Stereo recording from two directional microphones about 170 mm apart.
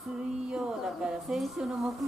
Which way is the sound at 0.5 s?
5° right (ahead or behind).